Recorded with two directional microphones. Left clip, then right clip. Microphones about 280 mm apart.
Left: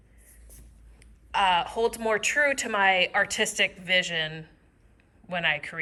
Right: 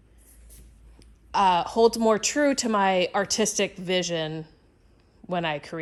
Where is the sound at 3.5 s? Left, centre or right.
Centre.